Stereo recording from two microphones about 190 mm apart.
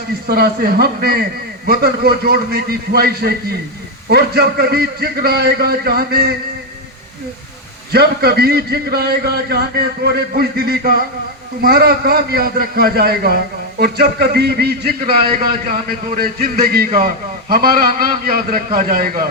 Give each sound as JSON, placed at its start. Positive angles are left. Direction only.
{"t": 0.3, "sound": "a man's voice", "side_deg": -55}
{"t": 7.9, "sound": "a man's voice", "side_deg": -55}